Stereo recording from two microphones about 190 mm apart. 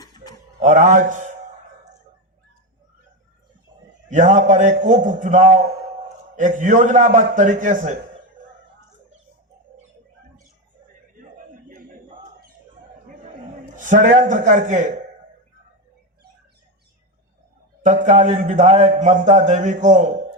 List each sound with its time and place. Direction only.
0.6 s a man's voice: 40° right (ahead or behind)
3.7 s a sound: 40° right (ahead or behind)
4.1 s a man's voice: 40° right (ahead or behind)
11.3 s a sound: 45° right (ahead or behind)
13.7 s a man's voice: 40° right (ahead or behind)
17.8 s a man's voice: 40° right (ahead or behind)